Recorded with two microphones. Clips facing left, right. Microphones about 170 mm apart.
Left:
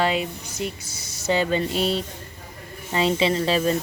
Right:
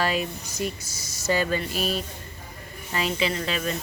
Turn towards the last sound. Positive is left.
turn(degrees=30)  # may be behind; listen again after turning